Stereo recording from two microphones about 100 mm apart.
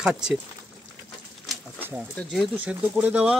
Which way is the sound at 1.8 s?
20° right (ahead or behind).